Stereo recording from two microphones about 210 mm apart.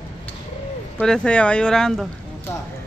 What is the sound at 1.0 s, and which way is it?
Speech, 5° left (ahead or behind).